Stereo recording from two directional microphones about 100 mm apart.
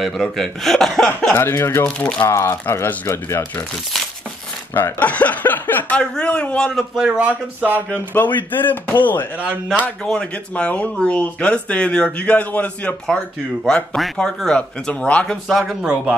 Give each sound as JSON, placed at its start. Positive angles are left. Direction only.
{"t": 0.0, "sound": "speech", "side_deg": 5}
{"t": 1.3, "sound": "speech", "side_deg": 25}
{"t": 1.9, "sound": "speech", "side_deg": 10}
{"t": 2.1, "sound": "speech", "side_deg": 25}
{"t": 4.7, "sound": "speech", "side_deg": 15}
{"t": 7.1, "sound": "speech", "side_deg": -15}
{"t": 8.5, "sound": "speech", "side_deg": 20}